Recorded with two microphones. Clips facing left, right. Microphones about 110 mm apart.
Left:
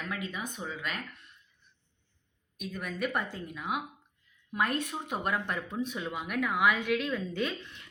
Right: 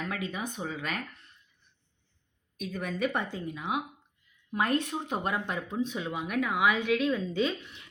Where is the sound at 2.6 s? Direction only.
35° right (ahead or behind).